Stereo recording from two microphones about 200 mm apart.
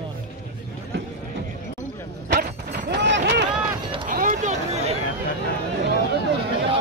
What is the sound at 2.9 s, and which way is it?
Run, 60° right (ahead or behind).